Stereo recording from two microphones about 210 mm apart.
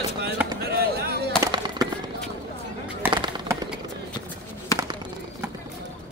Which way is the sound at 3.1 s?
20° right (ahead or behind).